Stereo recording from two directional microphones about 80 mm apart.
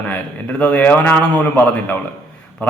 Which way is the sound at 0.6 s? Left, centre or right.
Centre.